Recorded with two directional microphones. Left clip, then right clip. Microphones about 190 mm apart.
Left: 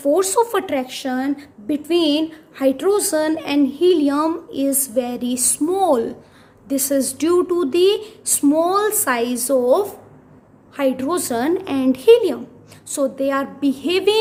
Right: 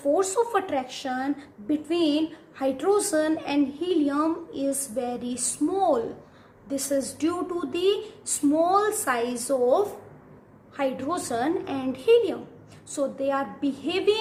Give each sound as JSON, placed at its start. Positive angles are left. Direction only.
{"t": 0.1, "sound": "a woman's voice", "side_deg": 50}